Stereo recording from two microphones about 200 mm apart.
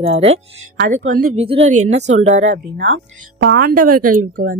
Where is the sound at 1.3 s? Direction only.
30° right (ahead or behind).